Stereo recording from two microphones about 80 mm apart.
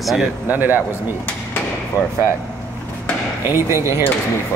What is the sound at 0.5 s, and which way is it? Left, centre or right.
Speech, right.